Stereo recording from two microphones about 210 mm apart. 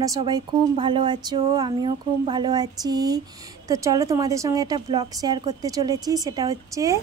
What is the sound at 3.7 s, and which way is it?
A woman's voice, 15° right (ahead or behind).